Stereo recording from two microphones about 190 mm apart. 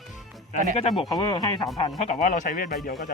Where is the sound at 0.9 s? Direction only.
20° left (ahead or behind).